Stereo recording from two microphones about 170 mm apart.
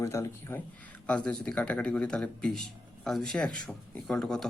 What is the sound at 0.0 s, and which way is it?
Speech, 15° left (ahead or behind).